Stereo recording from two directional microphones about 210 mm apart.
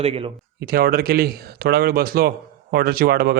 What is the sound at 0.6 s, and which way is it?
Speech, 45° right (ahead or behind).